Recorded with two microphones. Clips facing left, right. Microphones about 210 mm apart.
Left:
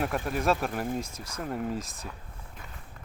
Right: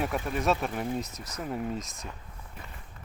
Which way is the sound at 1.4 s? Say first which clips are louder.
Left 1 dB; centre (ahead or behind).